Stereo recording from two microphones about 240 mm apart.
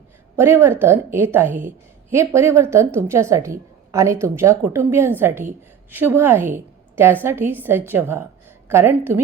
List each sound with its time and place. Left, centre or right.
0.3 s a woman's voice: centre